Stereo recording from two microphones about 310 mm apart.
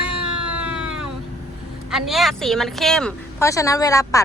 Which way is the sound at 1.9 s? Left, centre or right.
Centre.